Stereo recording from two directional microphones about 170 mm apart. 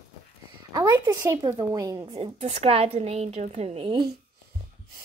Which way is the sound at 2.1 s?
35° right (ahead or behind).